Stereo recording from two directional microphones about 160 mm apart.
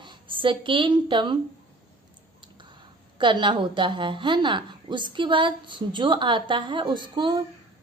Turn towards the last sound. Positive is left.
turn(degrees=-30)  # may be behind; listen again after turning